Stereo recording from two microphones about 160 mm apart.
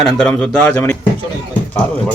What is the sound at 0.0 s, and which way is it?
Speech, centre (ahead or behind).